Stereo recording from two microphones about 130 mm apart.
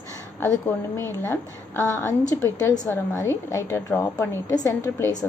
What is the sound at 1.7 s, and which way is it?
A woman's voice, 15° left (ahead or behind).